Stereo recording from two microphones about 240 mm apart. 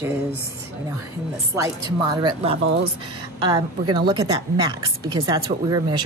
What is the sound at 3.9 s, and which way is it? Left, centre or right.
A woman's voice, centre.